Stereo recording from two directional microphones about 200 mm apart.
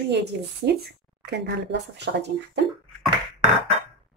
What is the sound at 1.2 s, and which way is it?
Speech, 55° right (ahead or behind).